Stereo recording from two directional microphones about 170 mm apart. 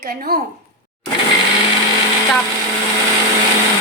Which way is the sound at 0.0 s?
65° right (ahead or behind).